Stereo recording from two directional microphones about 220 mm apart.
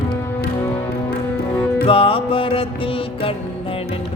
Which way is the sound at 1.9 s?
25° left (ahead or behind).